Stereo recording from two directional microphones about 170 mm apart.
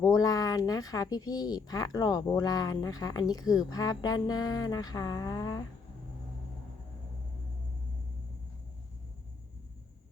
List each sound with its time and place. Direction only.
0.0 s speech: 20° left (ahead or behind)